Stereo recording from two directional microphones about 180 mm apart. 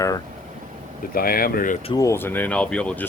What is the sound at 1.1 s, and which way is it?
Speech, 55° left (ahead or behind).